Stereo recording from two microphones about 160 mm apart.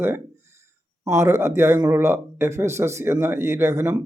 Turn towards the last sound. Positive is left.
turn(degrees=-15)  # may be behind; listen again after turning